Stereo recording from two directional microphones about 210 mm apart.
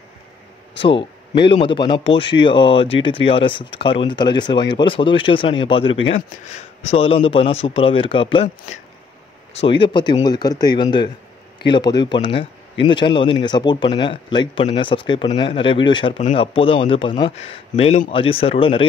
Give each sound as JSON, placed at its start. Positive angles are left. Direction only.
{"t": 0.7, "sound": "a man's voice", "side_deg": 25}
{"t": 9.5, "sound": "a man's voice", "side_deg": 25}